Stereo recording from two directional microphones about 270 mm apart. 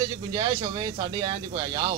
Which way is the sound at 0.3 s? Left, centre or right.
Centre.